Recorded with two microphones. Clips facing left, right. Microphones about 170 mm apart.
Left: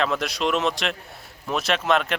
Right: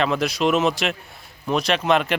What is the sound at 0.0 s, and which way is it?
Speech, centre (ahead or behind).